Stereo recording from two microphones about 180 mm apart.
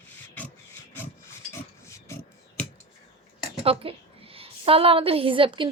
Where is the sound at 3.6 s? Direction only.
30° right (ahead or behind).